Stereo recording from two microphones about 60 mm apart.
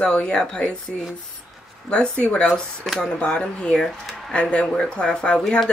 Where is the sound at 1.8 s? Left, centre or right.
Centre.